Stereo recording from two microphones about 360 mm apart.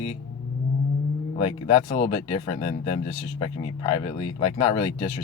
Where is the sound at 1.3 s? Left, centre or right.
Centre.